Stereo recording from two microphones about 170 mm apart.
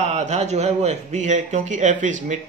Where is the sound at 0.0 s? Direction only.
40° right (ahead or behind).